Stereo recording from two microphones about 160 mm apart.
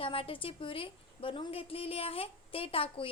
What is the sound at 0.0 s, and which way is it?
A woman's voice, 35° left (ahead or behind).